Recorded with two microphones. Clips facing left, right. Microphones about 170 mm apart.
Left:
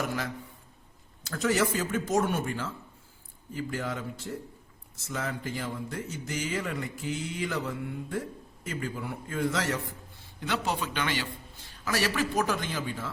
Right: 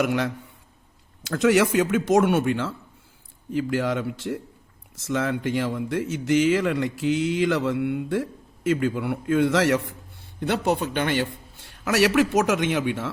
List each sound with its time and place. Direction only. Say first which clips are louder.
0.0 s speech: right 9 dB; 75° right (ahead or behind)
1.3 s speech: right 8 dB; 75° right (ahead or behind)
10.4 s speech: right 7 dB; 55° right (ahead or behind)
11.9 s speech: right 9 dB; 70° right (ahead or behind)